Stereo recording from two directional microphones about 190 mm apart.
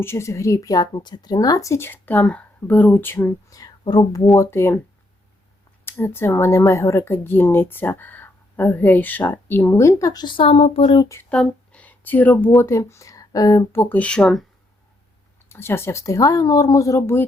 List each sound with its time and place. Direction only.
0.0 s speech: 15° left (ahead or behind)
5.8 s speech: 10° left (ahead or behind)
13.9 s speech: 5° left (ahead or behind)
15.4 s speech: 15° left (ahead or behind)